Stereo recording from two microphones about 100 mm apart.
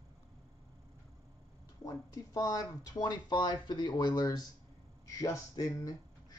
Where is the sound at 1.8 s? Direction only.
35° left (ahead or behind).